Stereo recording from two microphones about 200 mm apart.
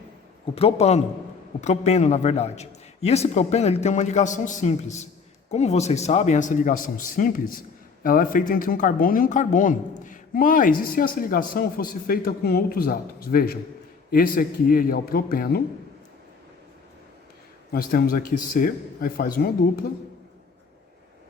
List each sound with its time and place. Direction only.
0.5 s a man's voice: 30° left (ahead or behind); by 15.6 s 50° left (ahead or behind)
17.7 s speech: 50° left (ahead or behind)